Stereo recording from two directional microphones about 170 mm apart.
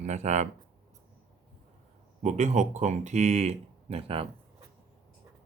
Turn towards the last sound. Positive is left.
turn(degrees=-35)  # may be behind; listen again after turning